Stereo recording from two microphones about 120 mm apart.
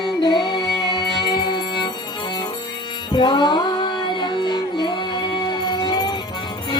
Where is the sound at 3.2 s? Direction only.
40° left (ahead or behind).